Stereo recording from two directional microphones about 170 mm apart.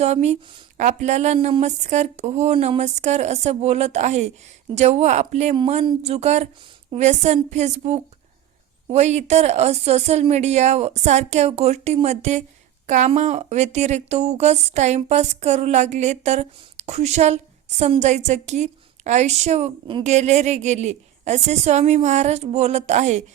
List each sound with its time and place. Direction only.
0.0 s a woman's voice: 40° right (ahead or behind)
5.5 s a woman's voice: 30° right (ahead or behind)